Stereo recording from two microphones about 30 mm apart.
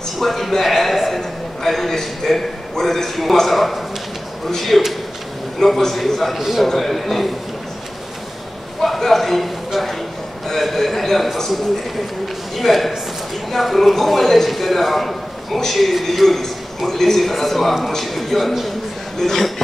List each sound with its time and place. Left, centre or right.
0.2 s a man's voice: centre
3.4 s a man's voice: centre
5.6 s a man's voice: centre
5.9 s a man's voice: centre
6.3 s a man's voice: centre
6.8 s a man's voice: centre
8.8 s a sound: centre
10.6 s a sound: centre
12.5 s a man's voice: centre
19.1 s speech: centre